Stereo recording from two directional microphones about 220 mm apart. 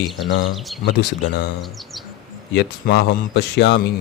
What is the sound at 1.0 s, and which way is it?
Speech, 45° left (ahead or behind).